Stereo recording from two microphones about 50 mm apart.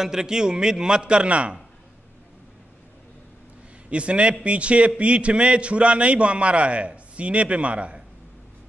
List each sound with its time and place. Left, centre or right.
0.0 s a man's voice: centre
3.9 s a man's voice: right